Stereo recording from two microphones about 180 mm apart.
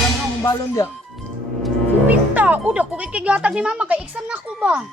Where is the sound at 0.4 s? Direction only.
15° left (ahead or behind).